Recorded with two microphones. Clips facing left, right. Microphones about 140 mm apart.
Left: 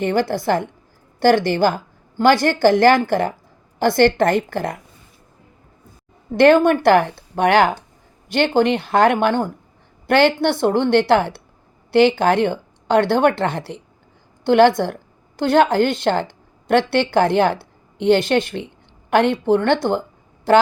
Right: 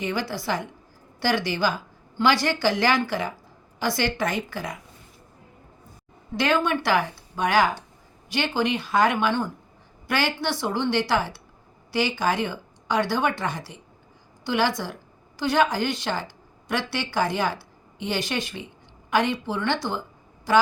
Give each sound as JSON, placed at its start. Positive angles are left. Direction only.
{"t": 0.0, "sound": "a woman's voice", "side_deg": 55}
{"t": 6.3, "sound": "speech", "side_deg": 55}
{"t": 10.1, "sound": "a woman's voice", "side_deg": 60}